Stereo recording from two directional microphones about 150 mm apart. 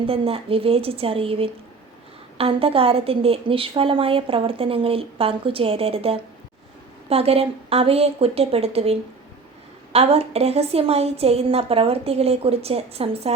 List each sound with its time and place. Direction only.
0.0 s a woman's voice: 40° right (ahead or behind)